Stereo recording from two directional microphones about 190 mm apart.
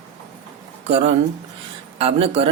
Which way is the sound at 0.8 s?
30° right (ahead or behind).